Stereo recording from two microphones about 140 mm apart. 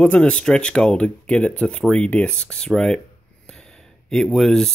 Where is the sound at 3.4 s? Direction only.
5° left (ahead or behind).